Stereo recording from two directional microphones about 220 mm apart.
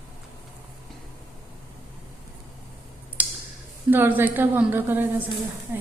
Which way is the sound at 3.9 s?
10° right (ahead or behind).